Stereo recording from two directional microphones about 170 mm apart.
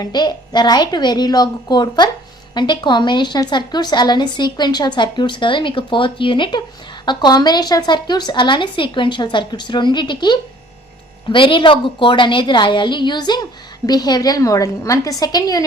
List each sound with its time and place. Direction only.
0.0 s a woman's voice: 25° left (ahead or behind)